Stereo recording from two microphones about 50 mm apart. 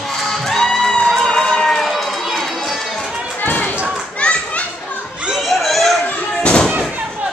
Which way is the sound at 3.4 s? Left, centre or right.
Left.